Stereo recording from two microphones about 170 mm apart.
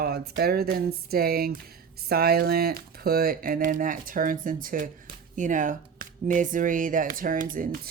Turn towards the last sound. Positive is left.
turn(degrees=-55)  # may be behind; listen again after turning